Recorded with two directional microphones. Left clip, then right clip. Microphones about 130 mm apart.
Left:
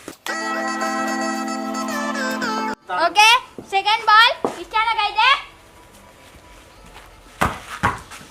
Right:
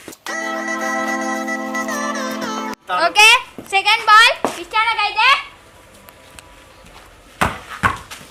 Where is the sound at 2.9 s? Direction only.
Centre (ahead or behind).